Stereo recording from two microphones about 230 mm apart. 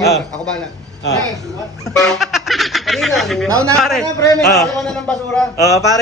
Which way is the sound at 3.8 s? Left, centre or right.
Centre.